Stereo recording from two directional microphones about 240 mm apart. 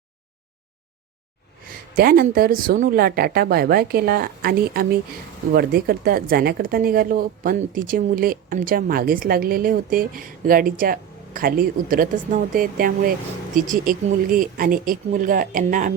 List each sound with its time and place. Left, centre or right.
2.0 s speech: right